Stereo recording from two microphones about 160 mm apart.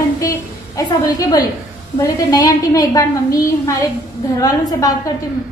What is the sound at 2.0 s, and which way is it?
A woman's voice, 20° left (ahead or behind).